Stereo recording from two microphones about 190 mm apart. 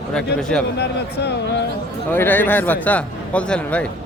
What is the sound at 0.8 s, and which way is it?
Speech, 60° left (ahead or behind).